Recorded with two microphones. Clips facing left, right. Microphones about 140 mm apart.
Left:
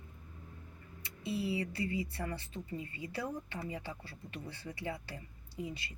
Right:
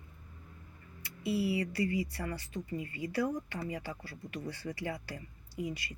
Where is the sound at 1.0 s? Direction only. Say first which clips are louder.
Right 4 dB; 25° left (ahead or behind).